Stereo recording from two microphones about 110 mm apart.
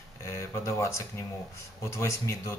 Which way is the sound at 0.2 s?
25° left (ahead or behind).